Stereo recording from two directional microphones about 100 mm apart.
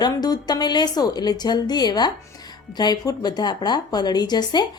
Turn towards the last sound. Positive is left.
turn(degrees=45)  # may be behind; listen again after turning